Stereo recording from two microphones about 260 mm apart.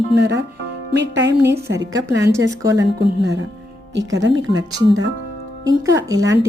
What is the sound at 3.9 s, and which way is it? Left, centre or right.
Speech, right.